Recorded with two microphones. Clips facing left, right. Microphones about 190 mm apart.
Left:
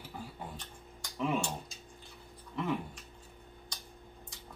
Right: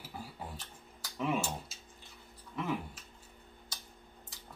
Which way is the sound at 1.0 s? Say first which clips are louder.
Left 1 dB; 5° right (ahead or behind).